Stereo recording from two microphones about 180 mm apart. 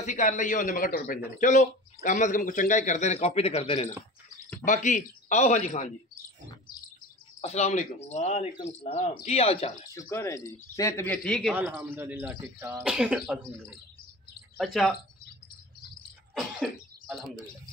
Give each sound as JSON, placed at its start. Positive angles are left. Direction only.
{"t": 0.0, "sound": "a man's voice", "side_deg": 45}
{"t": 7.4, "sound": "speech", "side_deg": 40}
{"t": 9.9, "sound": "speech", "side_deg": 15}
{"t": 11.5, "sound": "a man's voice", "side_deg": -10}
{"t": 14.6, "sound": "speech", "side_deg": 0}
{"t": 16.3, "sound": "cough", "side_deg": 0}